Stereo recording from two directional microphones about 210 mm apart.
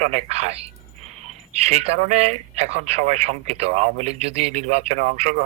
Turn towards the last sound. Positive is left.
turn(degrees=-35)  # may be behind; listen again after turning